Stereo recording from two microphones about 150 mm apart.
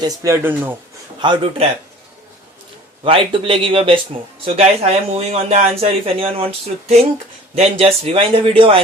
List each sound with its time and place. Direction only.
0.0 s speech: 20° right (ahead or behind)
1.2 s speech: 35° right (ahead or behind)
3.0 s speech: 35° right (ahead or behind)